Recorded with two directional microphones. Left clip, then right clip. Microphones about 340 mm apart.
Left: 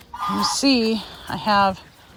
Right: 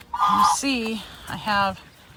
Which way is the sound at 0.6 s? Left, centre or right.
Centre.